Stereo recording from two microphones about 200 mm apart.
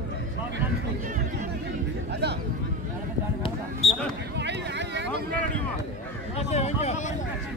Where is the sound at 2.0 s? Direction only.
55° right (ahead or behind).